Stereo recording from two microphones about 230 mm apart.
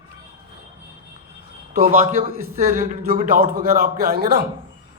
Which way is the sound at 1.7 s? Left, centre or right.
Right.